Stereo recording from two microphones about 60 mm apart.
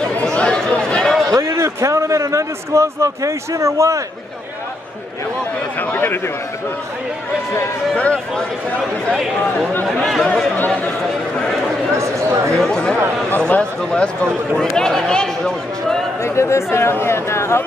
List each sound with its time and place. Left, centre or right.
0.1 s chatter: centre
1.4 s a man's voice: right
5.8 s speech: left
8.0 s speech: centre
9.8 s speech: centre
11.9 s a sound: right
12.5 s a man's voice: centre
16.2 s speech: left